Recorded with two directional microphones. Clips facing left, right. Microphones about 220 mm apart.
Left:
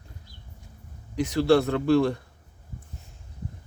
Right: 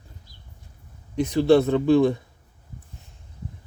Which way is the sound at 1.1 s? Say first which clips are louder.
Right 3 dB; 20° right (ahead or behind).